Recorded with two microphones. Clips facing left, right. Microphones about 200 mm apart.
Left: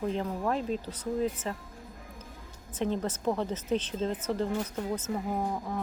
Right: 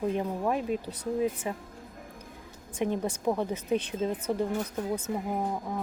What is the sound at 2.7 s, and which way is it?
Speech, 15° right (ahead or behind).